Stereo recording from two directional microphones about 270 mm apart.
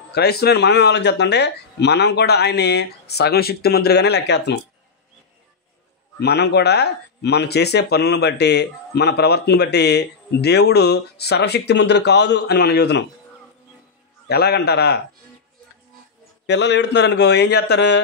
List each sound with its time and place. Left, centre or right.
0.1 s speech: left
6.1 s speech: left
14.2 s speech: left
16.4 s speech: left